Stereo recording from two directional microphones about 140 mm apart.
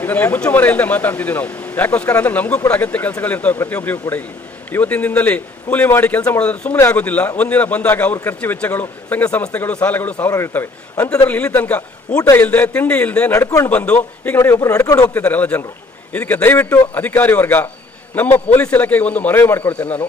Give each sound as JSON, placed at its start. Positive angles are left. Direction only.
{"t": 0.0, "sound": "a man's voice", "side_deg": 15}
{"t": 12.2, "sound": "speech", "side_deg": 20}
{"t": 12.5, "sound": "a man's voice", "side_deg": 10}
{"t": 13.3, "sound": "speech", "side_deg": 20}
{"t": 13.7, "sound": "a man's voice", "side_deg": 10}
{"t": 15.0, "sound": "a man's voice", "side_deg": 15}